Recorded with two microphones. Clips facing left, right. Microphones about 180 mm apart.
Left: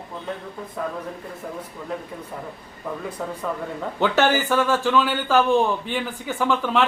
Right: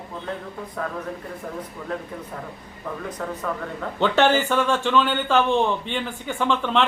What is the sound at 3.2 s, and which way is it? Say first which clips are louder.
Speech: even; 5° left (ahead or behind).